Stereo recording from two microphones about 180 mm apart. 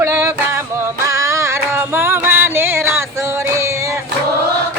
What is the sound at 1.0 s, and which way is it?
Music, 15° right (ahead or behind).